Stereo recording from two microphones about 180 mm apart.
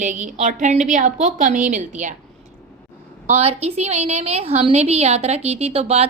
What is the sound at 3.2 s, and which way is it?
A woman's voice, 35° right (ahead or behind).